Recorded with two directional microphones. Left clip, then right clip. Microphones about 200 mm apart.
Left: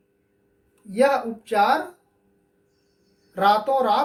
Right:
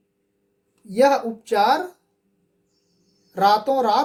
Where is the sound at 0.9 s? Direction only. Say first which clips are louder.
Right 2 dB; 60° right (ahead or behind).